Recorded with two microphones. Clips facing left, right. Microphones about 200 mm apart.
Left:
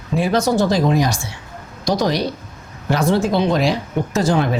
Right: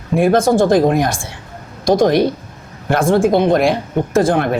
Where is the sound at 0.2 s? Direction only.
50° right (ahead or behind).